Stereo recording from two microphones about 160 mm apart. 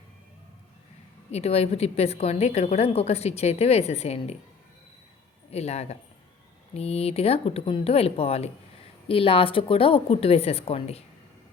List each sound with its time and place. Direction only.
1.3 s a woman's voice: 40° left (ahead or behind)
5.5 s a woman's voice: 40° left (ahead or behind)